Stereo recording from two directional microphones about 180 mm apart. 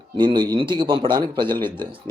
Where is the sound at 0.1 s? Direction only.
25° right (ahead or behind).